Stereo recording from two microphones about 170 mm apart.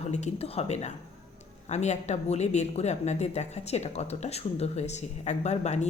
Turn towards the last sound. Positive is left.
turn(degrees=40)  # may be behind; listen again after turning